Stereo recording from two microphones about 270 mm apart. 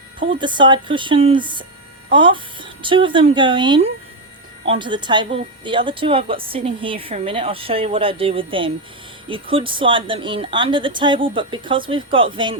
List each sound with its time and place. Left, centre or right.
0.2 s speech: centre